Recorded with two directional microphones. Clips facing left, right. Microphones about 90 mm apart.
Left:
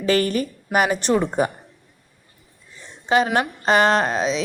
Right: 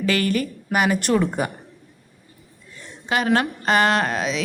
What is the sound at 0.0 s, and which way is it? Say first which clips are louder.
A woman's voice: left 2 dB; 35° left (ahead or behind).